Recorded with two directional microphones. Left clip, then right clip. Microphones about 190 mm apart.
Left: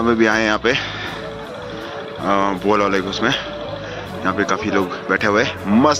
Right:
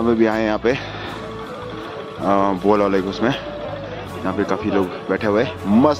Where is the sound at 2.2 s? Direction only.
20° right (ahead or behind).